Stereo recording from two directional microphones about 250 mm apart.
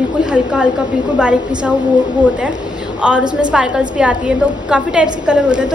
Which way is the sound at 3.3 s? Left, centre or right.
Centre.